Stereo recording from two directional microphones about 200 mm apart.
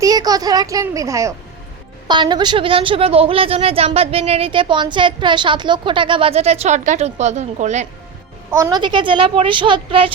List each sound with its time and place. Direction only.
0.0 s a child's voice: 20° right (ahead or behind); by 7.9 s 35° right (ahead or behind)
8.5 s a woman's voice: 15° right (ahead or behind)